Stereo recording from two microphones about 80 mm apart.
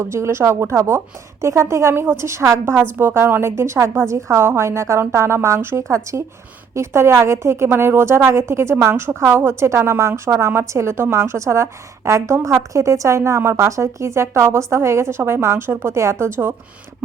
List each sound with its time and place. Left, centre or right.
0.0 s a woman's voice: right